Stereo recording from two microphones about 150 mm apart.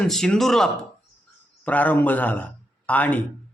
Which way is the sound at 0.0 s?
5° left (ahead or behind).